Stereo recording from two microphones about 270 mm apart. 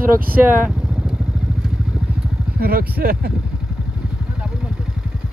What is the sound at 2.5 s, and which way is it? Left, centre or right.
Speech, right.